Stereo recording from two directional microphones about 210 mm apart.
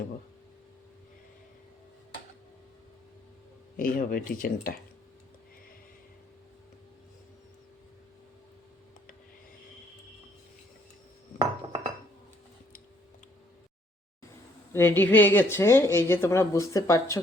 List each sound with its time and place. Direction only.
3.8 s speech: 40° left (ahead or behind)
11.3 s cutlery: 25° right (ahead or behind)
14.7 s speech: 10° left (ahead or behind)